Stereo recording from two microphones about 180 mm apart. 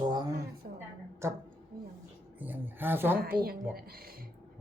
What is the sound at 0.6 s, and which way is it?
Speech, 50° right (ahead or behind).